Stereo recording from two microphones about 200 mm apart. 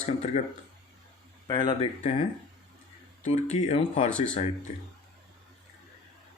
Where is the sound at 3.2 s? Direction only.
35° left (ahead or behind).